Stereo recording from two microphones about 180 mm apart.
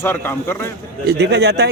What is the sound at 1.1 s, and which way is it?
Speech, 70° right (ahead or behind).